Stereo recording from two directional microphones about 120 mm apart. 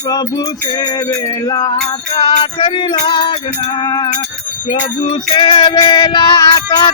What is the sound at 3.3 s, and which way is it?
Music, 65° left (ahead or behind).